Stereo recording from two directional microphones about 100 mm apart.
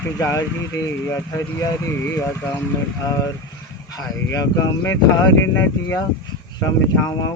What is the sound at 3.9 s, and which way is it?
Speech, 35° left (ahead or behind).